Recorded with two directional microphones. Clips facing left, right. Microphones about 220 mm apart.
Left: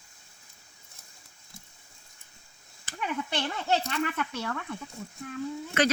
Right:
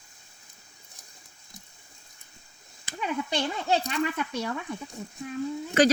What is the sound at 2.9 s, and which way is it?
Speech, 15° right (ahead or behind).